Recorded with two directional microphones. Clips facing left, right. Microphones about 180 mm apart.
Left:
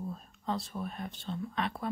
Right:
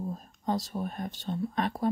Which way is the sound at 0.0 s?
40° right (ahead or behind).